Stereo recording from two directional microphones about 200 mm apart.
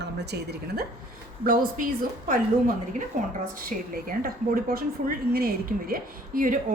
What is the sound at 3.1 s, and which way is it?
A woman's voice, 35° right (ahead or behind).